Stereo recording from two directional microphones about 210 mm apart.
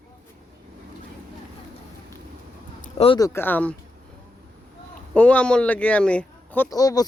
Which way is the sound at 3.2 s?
10° left (ahead or behind).